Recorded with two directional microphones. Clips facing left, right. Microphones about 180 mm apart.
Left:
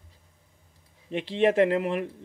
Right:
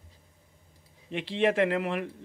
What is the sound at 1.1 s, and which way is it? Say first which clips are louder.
A man's voice: left 3 dB; 40° left (ahead or behind).